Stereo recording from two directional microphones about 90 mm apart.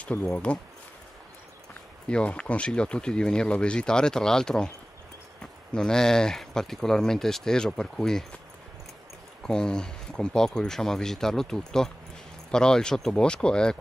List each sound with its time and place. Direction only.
0.0 s speech: 20° left (ahead or behind)
2.0 s speech: 10° left (ahead or behind)
9.4 s speech: 10° left (ahead or behind)